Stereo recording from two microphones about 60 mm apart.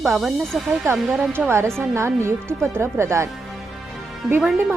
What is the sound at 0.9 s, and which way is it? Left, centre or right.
Speech, centre.